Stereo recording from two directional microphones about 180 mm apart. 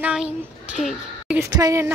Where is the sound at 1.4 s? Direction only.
20° right (ahead or behind).